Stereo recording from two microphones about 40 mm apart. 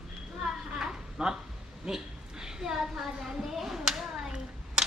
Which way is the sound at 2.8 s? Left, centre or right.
Centre.